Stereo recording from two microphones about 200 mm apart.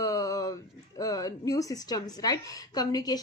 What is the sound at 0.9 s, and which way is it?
A woman's voice, 15° left (ahead or behind).